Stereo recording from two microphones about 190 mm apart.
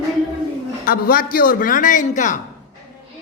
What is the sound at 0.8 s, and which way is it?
Speech, 50° left (ahead or behind).